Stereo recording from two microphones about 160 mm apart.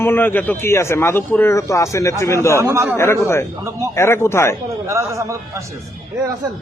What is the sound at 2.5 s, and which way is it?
Speech, 20° right (ahead or behind).